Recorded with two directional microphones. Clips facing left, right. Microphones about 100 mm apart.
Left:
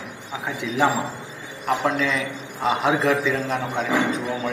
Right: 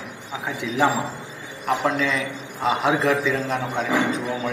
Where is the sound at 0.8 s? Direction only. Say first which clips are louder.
Even; 15° right (ahead or behind).